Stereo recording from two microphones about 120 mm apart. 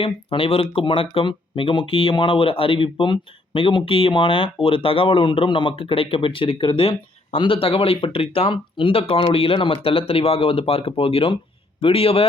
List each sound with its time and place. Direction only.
0.0 s speech: 50° left (ahead or behind)